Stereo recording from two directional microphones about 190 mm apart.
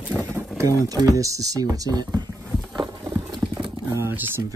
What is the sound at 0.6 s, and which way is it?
Speech, 15° right (ahead or behind).